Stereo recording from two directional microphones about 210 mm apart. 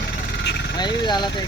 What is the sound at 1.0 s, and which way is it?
Speech, 20° left (ahead or behind).